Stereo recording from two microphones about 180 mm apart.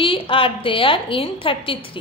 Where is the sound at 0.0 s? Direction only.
30° left (ahead or behind).